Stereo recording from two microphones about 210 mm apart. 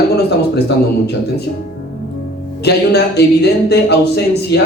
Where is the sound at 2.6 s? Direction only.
50° left (ahead or behind).